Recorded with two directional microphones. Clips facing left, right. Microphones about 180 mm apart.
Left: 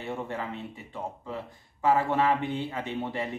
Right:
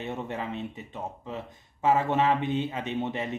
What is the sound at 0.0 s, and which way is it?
Speech, 20° right (ahead or behind).